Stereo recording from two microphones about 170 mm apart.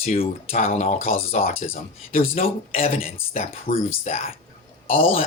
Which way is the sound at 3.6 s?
60° left (ahead or behind).